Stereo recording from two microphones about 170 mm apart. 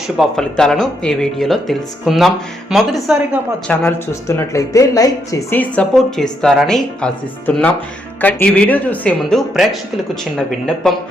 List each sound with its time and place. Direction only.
0.2 s speech: 5° left (ahead or behind)
3.7 s speech: 15° left (ahead or behind)